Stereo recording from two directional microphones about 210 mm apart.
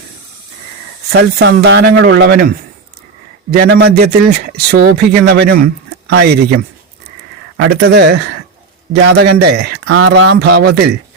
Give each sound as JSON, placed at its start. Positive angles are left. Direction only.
{"t": 1.1, "sound": "speech", "side_deg": -55}
{"t": 3.5, "sound": "speech", "side_deg": -50}
{"t": 7.7, "sound": "speech", "side_deg": -50}
{"t": 9.8, "sound": "speech", "side_deg": -75}